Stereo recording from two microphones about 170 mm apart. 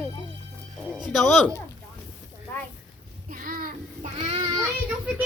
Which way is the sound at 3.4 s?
55° right (ahead or behind).